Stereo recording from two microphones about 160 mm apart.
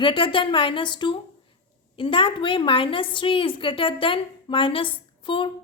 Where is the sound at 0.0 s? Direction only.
30° left (ahead or behind).